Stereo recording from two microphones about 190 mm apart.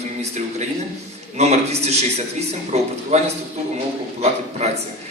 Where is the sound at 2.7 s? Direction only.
35° right (ahead or behind).